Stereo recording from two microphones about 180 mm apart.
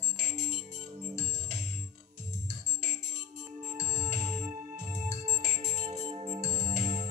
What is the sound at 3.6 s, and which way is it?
Music, 40° right (ahead or behind).